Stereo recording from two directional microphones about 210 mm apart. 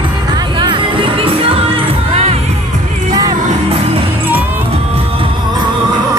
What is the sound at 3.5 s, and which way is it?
Music, 30° right (ahead or behind).